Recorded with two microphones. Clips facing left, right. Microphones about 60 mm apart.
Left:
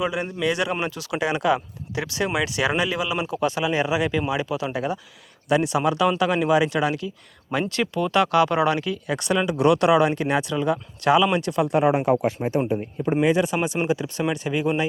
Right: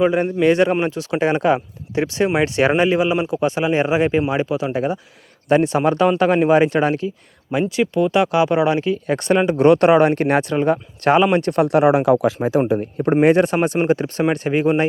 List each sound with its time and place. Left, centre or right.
0.0 s speech: right
7.7 s speech: centre; by 13.1 s right
13.2 s speech: right